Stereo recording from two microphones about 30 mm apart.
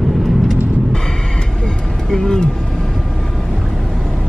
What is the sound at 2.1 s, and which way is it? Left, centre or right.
Vehicle, left.